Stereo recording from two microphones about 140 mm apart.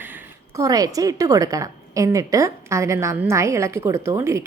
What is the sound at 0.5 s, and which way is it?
A woman's voice, 25° right (ahead or behind).